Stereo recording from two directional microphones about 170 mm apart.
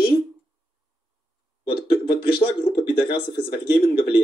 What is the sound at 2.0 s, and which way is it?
Speech, 30° left (ahead or behind).